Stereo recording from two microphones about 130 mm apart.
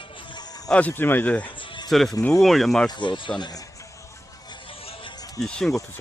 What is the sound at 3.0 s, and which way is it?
Music, 40° left (ahead or behind).